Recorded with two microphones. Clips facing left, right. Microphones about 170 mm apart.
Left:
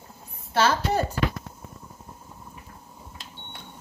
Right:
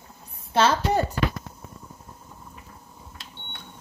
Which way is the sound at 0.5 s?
20° right (ahead or behind).